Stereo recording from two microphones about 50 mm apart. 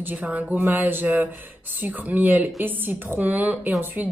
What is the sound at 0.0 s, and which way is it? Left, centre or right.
Speech, right.